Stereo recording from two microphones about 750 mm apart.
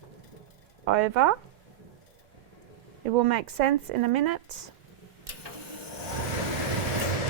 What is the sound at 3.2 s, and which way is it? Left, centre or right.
Speech, right.